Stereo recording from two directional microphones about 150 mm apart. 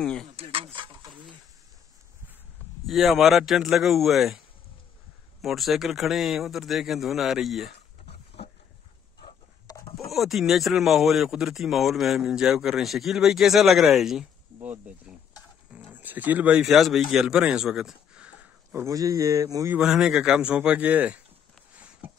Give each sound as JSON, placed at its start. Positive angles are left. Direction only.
{"t": 0.0, "sound": "speech", "side_deg": 5}
{"t": 0.4, "sound": "speech", "side_deg": -40}
{"t": 2.9, "sound": "speech", "side_deg": 0}
{"t": 5.4, "sound": "speech", "side_deg": 0}
{"t": 9.9, "sound": "speech", "side_deg": 0}
{"t": 19.7, "sound": "speech", "side_deg": -5}
{"t": 21.7, "sound": "a sound", "side_deg": -10}